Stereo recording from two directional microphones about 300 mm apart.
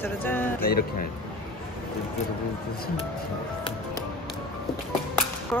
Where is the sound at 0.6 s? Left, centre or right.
Left.